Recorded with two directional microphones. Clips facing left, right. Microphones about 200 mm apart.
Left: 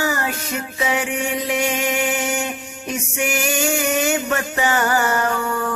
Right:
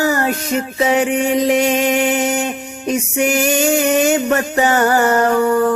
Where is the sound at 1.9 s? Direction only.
40° right (ahead or behind).